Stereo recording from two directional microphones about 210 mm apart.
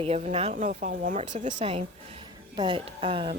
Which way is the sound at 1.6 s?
30° right (ahead or behind).